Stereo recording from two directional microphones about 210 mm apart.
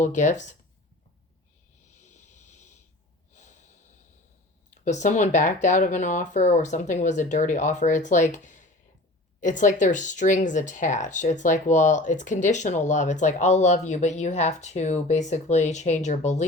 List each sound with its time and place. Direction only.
0.0 s speech: 35° left (ahead or behind)
2.0 s a sound: 35° left (ahead or behind)
3.3 s snort: 35° left (ahead or behind)
4.7 s speech: 35° left (ahead or behind)